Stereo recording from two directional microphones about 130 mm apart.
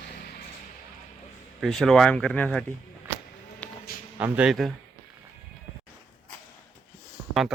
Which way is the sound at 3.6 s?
10° left (ahead or behind).